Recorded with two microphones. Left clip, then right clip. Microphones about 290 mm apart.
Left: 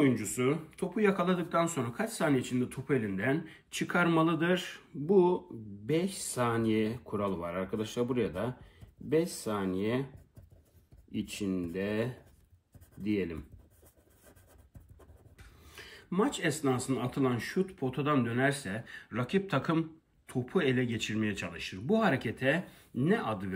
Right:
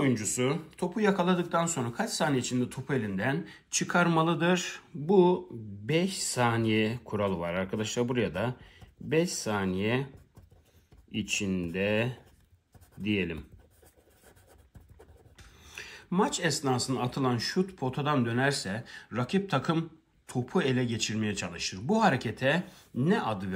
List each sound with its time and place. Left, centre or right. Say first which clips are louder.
0.0 s speech: even; centre
5.0 s speech: right 2 dB; right
11.1 s speech: right 5 dB; right
13.0 s speech: right 2 dB; right
15.6 s a sound: right 6 dB; centre
16.6 s speech: right 2 dB; centre